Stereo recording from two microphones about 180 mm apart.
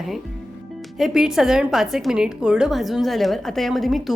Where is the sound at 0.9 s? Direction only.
5° right (ahead or behind).